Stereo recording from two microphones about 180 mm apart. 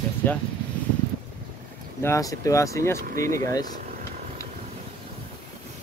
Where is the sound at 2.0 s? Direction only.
15° left (ahead or behind).